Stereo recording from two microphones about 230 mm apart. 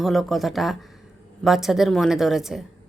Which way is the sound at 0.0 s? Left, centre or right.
Centre.